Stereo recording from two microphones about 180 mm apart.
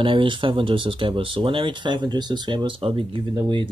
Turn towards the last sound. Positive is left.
turn(degrees=-25)  # may be behind; listen again after turning